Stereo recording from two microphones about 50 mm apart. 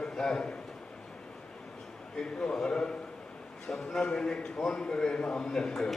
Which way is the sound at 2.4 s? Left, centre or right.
Centre.